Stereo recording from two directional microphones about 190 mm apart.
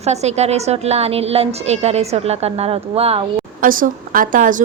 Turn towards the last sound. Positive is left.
turn(degrees=-45)  # may be behind; listen again after turning